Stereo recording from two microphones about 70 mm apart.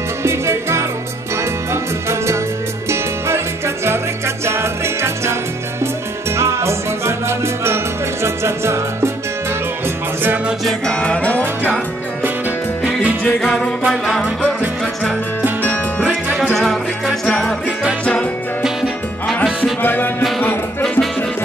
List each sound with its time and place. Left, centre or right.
0.2 s music: right
10.9 s music: centre
13.2 s music: centre
13.8 s music: centre
15.6 s music: left
16.5 s music: centre
18.6 s music: centre
19.8 s music: left